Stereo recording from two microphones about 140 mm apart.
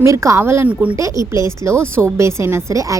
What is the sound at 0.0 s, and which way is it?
Speech, 20° right (ahead or behind).